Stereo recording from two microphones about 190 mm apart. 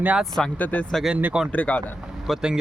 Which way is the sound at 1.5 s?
10° left (ahead or behind).